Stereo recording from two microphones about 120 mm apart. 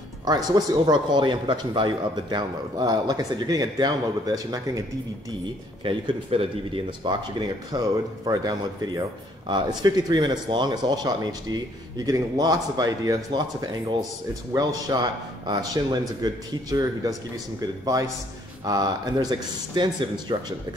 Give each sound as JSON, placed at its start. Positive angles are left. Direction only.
{"t": 0.2, "sound": "speech", "side_deg": -35}
{"t": 5.9, "sound": "speech", "side_deg": -50}